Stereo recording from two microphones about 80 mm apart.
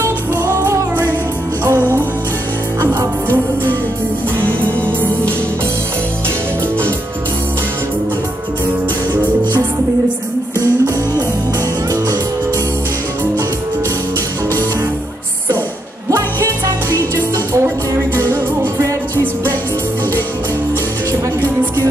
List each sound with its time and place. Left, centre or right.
0.0 s music: right
4.7 s music: centre
16.1 s music: right